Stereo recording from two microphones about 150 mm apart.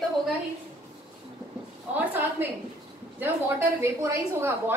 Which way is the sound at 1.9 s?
10° right (ahead or behind).